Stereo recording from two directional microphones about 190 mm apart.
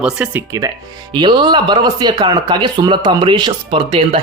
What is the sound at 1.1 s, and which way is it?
Speech, 25° right (ahead or behind).